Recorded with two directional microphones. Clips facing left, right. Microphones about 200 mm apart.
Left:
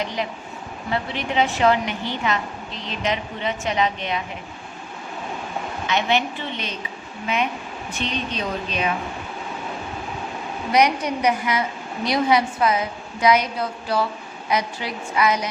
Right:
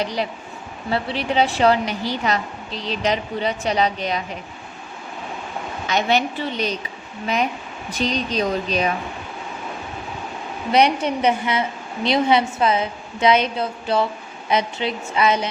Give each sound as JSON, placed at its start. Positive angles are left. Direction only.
{"t": 0.0, "sound": "a woman's voice", "side_deg": -35}
{"t": 5.9, "sound": "a woman's voice", "side_deg": -40}
{"t": 7.9, "sound": "a woman's voice", "side_deg": -40}
{"t": 10.7, "sound": "a woman's voice", "side_deg": -30}